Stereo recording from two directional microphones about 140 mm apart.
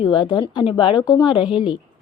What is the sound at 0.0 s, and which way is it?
A woman's voice, 35° left (ahead or behind).